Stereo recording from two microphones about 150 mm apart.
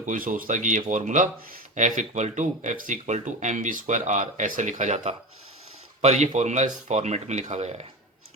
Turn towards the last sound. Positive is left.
turn(degrees=-45)  # may be behind; listen again after turning